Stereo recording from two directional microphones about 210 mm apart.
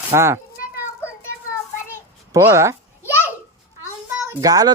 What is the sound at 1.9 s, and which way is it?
Babbling, 10° right (ahead or behind).